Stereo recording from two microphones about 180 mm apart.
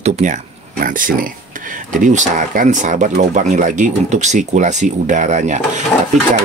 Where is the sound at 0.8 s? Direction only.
50° right (ahead or behind).